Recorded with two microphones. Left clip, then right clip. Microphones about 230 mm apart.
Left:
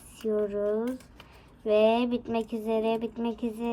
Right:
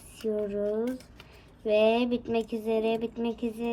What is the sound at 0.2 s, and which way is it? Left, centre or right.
Speech, centre.